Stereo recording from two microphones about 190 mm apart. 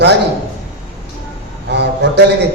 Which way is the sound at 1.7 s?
65° right (ahead or behind).